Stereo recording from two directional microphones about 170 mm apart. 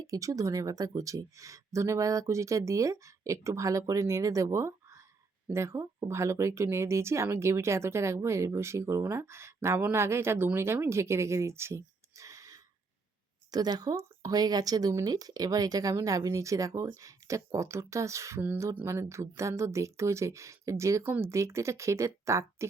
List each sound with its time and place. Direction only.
0.0 s speech: 20° right (ahead or behind)